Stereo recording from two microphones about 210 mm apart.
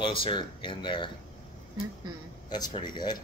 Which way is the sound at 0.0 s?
25° left (ahead or behind).